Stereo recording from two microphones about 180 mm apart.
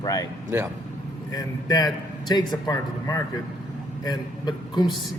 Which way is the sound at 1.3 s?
20° left (ahead or behind).